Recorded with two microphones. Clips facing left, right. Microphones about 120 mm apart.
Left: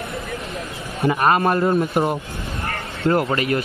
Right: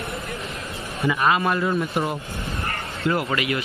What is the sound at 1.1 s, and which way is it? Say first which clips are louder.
A man's voice: left 3 dB; 45° left (ahead or behind).